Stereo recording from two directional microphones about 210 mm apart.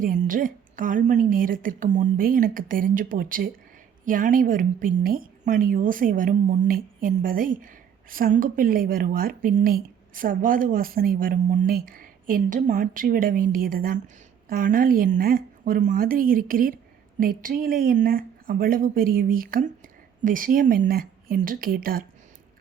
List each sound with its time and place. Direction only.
0.0 s speech: 40° right (ahead or behind)